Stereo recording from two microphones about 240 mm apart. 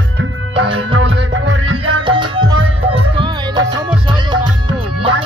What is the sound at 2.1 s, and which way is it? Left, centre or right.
Music, centre.